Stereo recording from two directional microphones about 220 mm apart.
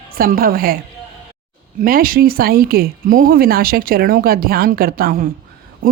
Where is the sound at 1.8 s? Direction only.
40° right (ahead or behind).